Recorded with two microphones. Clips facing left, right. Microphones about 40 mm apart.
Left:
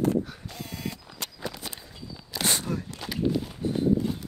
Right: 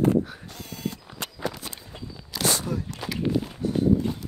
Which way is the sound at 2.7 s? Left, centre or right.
Left.